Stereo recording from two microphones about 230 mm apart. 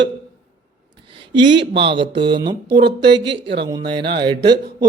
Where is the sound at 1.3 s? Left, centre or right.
Right.